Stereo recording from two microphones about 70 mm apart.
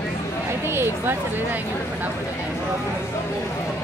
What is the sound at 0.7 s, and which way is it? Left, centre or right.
Speech, right.